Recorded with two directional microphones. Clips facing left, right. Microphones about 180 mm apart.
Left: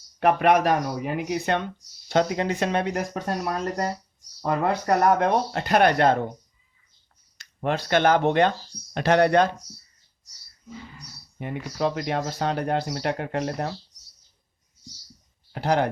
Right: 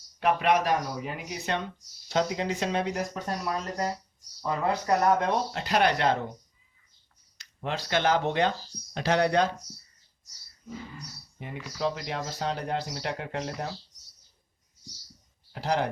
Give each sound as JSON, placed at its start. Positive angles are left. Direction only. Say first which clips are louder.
{"t": 0.2, "sound": "speech", "louder": "left 5 dB", "side_deg": 55}
{"t": 7.3, "sound": "speech", "louder": "left 7 dB", "side_deg": 55}
{"t": 11.3, "sound": "speech", "louder": "left 6 dB", "side_deg": 60}
{"t": 15.5, "sound": "speech", "louder": "left 5 dB", "side_deg": 60}